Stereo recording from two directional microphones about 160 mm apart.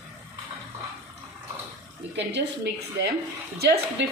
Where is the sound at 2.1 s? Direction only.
90° right.